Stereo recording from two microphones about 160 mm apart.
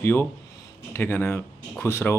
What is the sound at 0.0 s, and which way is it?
Speech, 15° left (ahead or behind).